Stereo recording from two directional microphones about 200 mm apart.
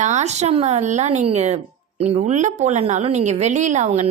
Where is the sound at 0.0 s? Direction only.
35° right (ahead or behind).